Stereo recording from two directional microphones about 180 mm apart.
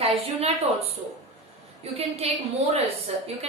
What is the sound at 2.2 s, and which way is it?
A woman's voice, 35° right (ahead or behind).